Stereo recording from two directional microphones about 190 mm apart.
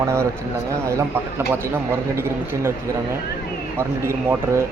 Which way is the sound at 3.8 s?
15° right (ahead or behind).